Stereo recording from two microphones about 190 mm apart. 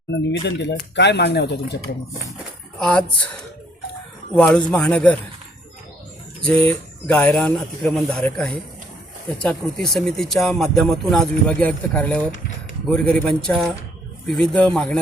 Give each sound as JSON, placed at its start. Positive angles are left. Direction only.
{"t": 0.4, "sound": "speech", "side_deg": 65}
{"t": 2.7, "sound": "speech", "side_deg": 5}
{"t": 4.4, "sound": "speech", "side_deg": 5}
{"t": 6.7, "sound": "speech", "side_deg": 5}